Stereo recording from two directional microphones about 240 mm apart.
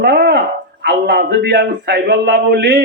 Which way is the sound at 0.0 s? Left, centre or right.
Right.